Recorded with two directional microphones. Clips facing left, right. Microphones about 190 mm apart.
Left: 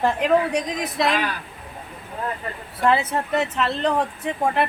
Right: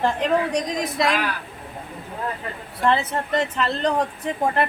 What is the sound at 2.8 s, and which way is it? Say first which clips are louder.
Speech: left 1 dB; 10° left (ahead or behind).